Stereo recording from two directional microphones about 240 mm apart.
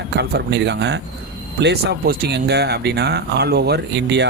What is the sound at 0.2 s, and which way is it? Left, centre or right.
Speech, right.